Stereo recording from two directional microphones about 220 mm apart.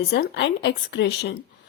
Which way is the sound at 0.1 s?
50° left (ahead or behind).